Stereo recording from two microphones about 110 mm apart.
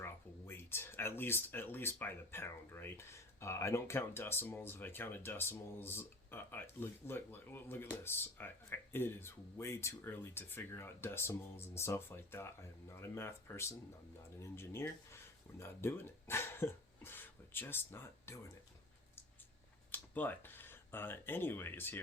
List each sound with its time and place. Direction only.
0.0 s speech: 20° left (ahead or behind)
19.9 s speech: 20° left (ahead or behind)